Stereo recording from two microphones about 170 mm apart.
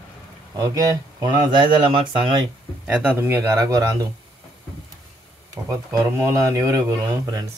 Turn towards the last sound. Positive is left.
turn(degrees=-20)  # may be behind; listen again after turning